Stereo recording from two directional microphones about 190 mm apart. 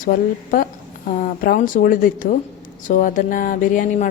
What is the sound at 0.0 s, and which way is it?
Speech, 50° left (ahead or behind).